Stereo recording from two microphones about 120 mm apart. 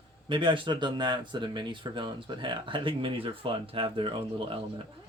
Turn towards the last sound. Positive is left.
turn(degrees=-50)  # may be behind; listen again after turning